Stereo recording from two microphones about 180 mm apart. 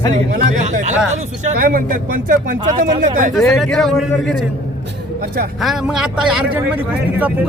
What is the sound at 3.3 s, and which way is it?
Speech, centre (ahead or behind).